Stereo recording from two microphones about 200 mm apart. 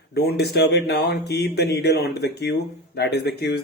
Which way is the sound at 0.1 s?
55° left (ahead or behind).